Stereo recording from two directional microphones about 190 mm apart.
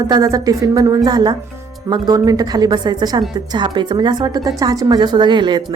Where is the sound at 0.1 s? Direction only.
20° right (ahead or behind).